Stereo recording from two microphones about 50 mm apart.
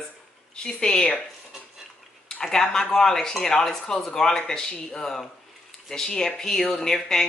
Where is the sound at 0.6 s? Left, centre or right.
Centre.